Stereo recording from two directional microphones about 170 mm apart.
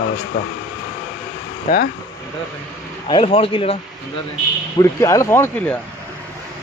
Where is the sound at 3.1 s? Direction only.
35° left (ahead or behind).